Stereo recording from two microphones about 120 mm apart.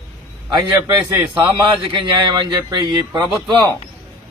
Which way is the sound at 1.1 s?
35° right (ahead or behind).